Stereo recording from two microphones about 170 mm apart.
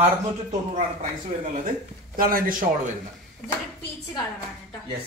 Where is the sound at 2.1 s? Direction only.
55° right (ahead or behind).